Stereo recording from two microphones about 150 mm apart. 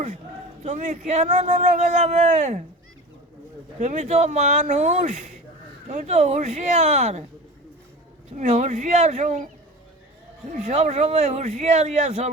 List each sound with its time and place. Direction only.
0.6 s speech: 55° right (ahead or behind)
3.8 s speech: 50° right (ahead or behind)
8.4 s speech: 50° right (ahead or behind)
10.5 s speech: 50° right (ahead or behind)